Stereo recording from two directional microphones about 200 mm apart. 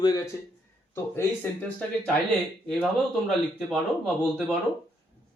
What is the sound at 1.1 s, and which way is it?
Speech, 10° left (ahead or behind).